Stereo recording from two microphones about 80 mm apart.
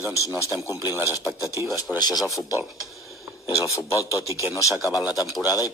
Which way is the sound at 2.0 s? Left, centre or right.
Left.